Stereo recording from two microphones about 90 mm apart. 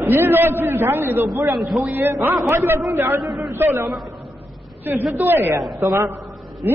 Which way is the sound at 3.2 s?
Centre (ahead or behind).